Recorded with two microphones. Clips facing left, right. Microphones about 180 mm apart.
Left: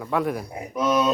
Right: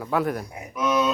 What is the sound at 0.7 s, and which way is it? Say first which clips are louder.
Speech: left 1 dB; 35° left (ahead or behind).